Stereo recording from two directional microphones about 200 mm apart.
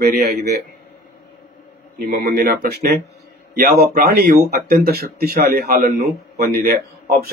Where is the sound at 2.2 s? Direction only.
50° right (ahead or behind).